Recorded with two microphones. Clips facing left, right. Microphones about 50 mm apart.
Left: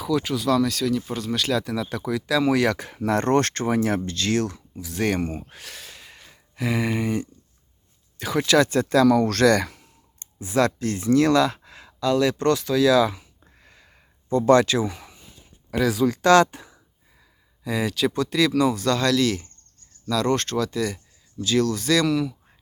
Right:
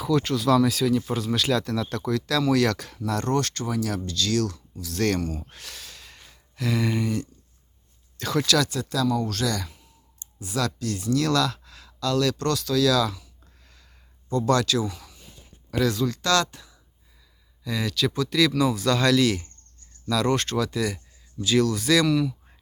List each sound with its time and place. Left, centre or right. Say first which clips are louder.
0.0 s speech: even; centre; by 3.0 s left
3.0 s speech: left 5 dB; left
5.5 s a sound: left 2 dB; centre
6.6 s speech: left 1 dB; centre
8.4 s speech: left 4 dB; left
8.8 s speech: left 8 dB; left
10.4 s speech: left 6 dB; left
13.4 s a sound: left 4 dB; left
15.7 s speech: left 3 dB; centre; by 16.8 s left
17.7 s speech: left 3 dB; centre